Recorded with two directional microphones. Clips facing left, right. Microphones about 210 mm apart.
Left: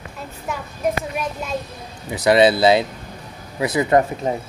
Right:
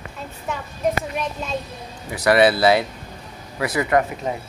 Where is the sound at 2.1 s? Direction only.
20° left (ahead or behind).